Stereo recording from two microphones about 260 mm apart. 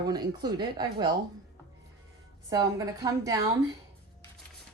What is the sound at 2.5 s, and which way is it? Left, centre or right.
Speech, centre.